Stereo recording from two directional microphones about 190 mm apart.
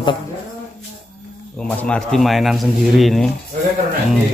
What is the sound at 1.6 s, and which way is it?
Speech, 5° left (ahead or behind).